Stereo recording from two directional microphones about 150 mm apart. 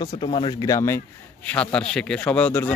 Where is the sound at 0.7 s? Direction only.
20° left (ahead or behind).